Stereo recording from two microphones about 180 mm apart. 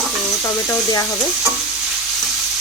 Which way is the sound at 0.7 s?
15° left (ahead or behind).